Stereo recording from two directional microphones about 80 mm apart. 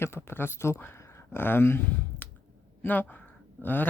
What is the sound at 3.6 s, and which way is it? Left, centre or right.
Speech, left.